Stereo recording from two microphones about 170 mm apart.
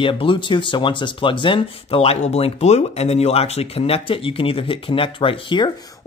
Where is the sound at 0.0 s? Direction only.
30° left (ahead or behind).